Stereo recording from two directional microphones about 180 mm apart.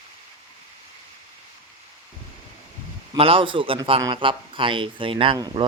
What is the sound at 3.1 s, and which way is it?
A man's voice, 30° right (ahead or behind).